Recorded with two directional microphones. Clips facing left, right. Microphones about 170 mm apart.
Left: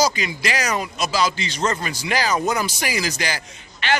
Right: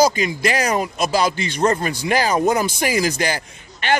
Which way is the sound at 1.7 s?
35° right (ahead or behind).